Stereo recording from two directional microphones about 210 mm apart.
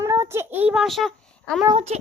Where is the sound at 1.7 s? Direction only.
25° right (ahead or behind).